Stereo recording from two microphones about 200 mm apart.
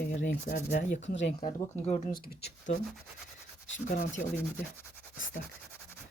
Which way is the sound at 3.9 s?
40° left (ahead or behind).